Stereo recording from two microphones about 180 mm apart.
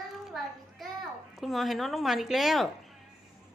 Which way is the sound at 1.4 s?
Centre (ahead or behind).